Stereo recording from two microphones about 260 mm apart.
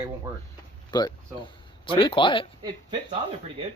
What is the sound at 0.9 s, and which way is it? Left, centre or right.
Speech, centre.